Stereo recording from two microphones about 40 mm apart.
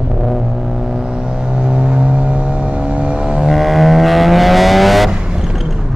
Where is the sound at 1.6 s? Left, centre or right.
Right.